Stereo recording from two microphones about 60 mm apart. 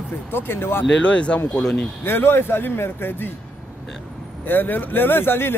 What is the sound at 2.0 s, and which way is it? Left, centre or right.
Speech, left.